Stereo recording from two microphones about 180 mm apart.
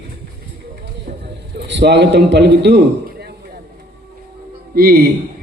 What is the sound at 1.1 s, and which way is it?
Vehicle, 50° right (ahead or behind).